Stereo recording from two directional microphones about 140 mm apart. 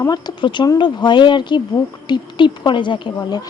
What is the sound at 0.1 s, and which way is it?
Speech, 30° left (ahead or behind).